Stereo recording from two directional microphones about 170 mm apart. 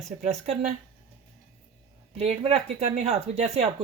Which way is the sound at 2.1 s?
35° right (ahead or behind).